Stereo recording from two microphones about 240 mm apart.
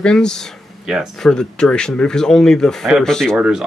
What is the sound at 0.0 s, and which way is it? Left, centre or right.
Speech, centre.